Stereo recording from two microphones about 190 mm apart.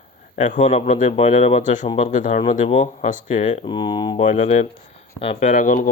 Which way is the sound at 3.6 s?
25° left (ahead or behind).